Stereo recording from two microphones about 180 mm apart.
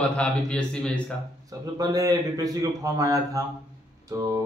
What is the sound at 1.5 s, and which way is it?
Speech, 20° right (ahead or behind).